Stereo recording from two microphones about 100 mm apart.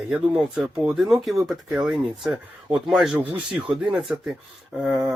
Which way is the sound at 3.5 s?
5° right (ahead or behind).